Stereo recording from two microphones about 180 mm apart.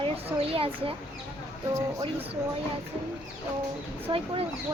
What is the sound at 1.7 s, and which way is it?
Speech, 15° right (ahead or behind).